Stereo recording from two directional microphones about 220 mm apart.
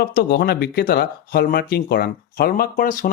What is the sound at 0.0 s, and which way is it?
Speech, 45° left (ahead or behind).